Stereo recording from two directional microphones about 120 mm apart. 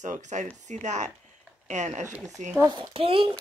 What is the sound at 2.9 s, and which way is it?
Speech, 50° right (ahead or behind).